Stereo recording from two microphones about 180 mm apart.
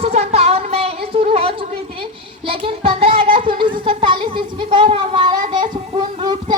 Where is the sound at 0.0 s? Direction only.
35° right (ahead or behind).